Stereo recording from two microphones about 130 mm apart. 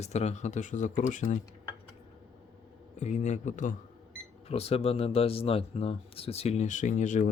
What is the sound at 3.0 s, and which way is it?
Speech, 65° left (ahead or behind).